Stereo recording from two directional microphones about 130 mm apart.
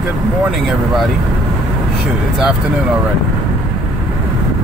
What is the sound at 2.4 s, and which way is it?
Speech, 10° right (ahead or behind).